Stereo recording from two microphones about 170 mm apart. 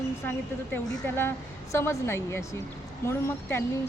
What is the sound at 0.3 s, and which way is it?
A woman's voice, 15° left (ahead or behind).